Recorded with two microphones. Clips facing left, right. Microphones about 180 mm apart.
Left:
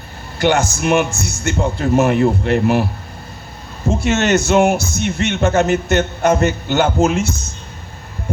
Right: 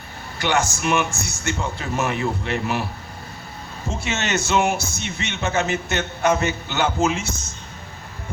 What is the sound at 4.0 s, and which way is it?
A man's voice, 45° left (ahead or behind).